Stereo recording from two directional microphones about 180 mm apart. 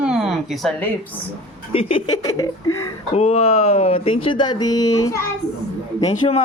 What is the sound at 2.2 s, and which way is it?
Speech, 20° left (ahead or behind).